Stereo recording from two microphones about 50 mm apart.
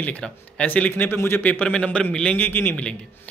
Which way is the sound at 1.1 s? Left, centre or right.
Left.